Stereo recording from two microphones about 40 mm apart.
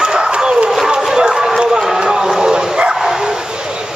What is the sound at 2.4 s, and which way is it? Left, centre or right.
Bow-wow, centre.